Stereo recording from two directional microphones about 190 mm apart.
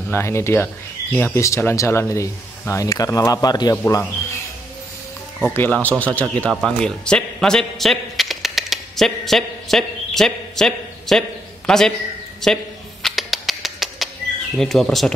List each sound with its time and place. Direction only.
0.1 s speech: 15° left (ahead or behind)
5.5 s speech: 10° left (ahead or behind)
6.2 s a man's voice: 5° right (ahead or behind)
13.0 s music: centre (ahead or behind)
14.6 s speech: centre (ahead or behind)